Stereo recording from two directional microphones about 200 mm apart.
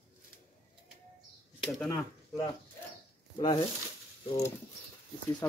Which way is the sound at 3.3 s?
25° left (ahead or behind).